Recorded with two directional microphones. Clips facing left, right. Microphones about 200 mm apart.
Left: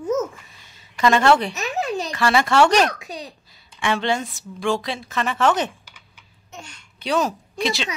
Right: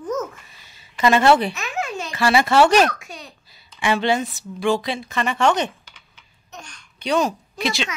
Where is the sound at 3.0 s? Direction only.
35° left (ahead or behind).